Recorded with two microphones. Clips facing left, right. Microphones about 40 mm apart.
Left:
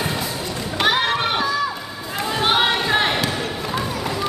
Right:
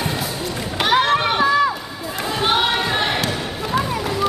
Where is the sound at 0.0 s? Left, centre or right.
Centre.